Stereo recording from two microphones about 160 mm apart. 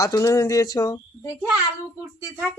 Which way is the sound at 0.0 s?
20° left (ahead or behind).